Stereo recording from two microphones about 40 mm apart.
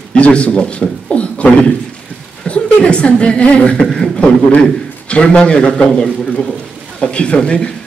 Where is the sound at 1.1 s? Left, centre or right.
Left.